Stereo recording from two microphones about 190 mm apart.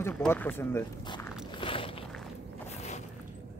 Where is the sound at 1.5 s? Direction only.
25° left (ahead or behind).